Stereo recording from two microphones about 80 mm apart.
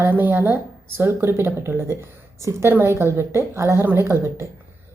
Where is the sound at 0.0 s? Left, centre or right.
Right.